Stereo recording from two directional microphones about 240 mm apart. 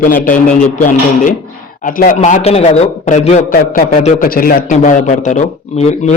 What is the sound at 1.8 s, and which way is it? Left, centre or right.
A man's voice, left.